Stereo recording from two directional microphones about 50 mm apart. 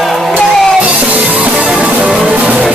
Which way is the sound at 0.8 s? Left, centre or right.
Right.